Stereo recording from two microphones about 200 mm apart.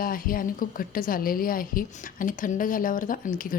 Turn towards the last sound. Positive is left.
turn(degrees=45)  # may be behind; listen again after turning